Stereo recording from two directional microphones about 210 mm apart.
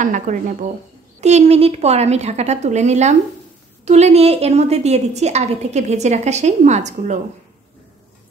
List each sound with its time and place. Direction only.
0.0 s a woman's voice: 35° right (ahead or behind)